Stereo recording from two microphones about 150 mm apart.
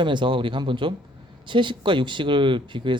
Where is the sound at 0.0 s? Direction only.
30° right (ahead or behind).